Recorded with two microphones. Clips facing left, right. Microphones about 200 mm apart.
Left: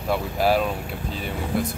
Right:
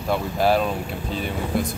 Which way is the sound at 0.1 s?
5° left (ahead or behind).